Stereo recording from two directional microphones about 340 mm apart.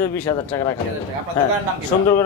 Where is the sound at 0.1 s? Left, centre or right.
Centre.